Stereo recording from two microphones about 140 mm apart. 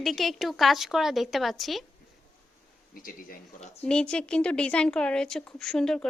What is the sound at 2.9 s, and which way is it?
Speech, 85° left.